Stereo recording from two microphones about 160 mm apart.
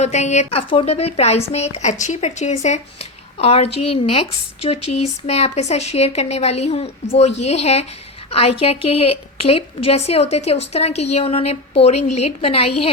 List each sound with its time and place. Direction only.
0.0 s a woman's voice: 45° left (ahead or behind)